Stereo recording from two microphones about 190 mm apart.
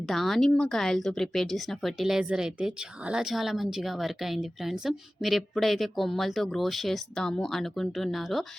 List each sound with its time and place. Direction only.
0.1 s speech: centre (ahead or behind)